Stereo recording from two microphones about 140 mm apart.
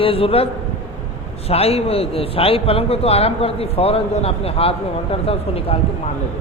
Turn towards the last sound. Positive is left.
turn(degrees=45)  # may be behind; listen again after turning